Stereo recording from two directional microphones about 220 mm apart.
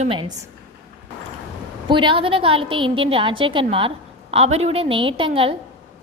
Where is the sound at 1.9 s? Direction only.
20° right (ahead or behind).